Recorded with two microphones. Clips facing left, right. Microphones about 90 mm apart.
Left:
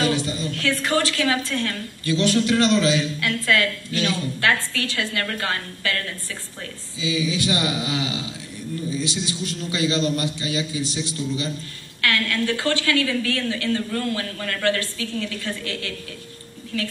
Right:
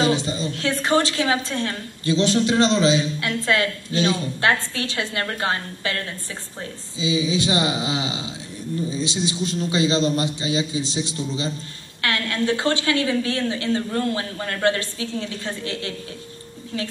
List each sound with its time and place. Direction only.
0.0 s a woman's voice: 25° right (ahead or behind)